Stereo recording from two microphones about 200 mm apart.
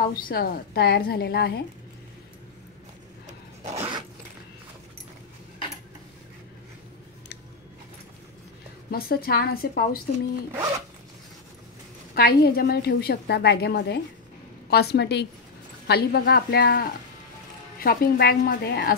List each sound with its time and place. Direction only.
0.0 s a woman's voice: 45° left (ahead or behind)
3.6 s zipper: 35° right (ahead or behind)
8.9 s a woman's voice: 50° left (ahead or behind)
12.2 s a woman's voice: 50° left (ahead or behind)